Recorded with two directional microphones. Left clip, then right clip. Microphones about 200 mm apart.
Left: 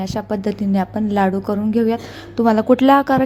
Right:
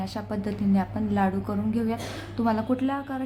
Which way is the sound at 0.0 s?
35° left (ahead or behind).